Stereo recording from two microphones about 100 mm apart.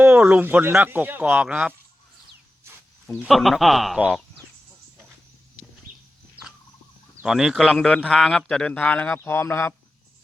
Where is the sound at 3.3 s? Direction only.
Centre (ahead or behind).